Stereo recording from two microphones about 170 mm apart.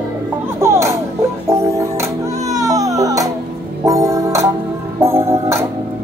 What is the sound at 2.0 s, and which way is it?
Music, 20° right (ahead or behind).